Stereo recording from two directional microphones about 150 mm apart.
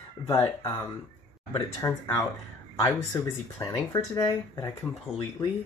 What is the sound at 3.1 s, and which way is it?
Speech, 25° left (ahead or behind).